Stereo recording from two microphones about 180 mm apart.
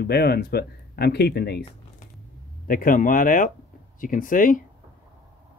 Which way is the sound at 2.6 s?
50° left (ahead or behind).